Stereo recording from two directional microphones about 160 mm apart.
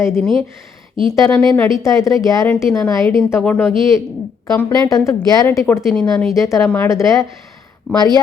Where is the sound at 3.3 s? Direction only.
10° left (ahead or behind).